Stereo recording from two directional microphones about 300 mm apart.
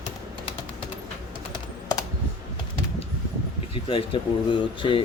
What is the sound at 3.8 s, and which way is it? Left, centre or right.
Speech, centre.